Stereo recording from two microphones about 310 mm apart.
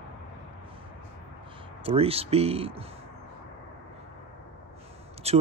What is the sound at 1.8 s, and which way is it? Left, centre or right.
Speech, centre.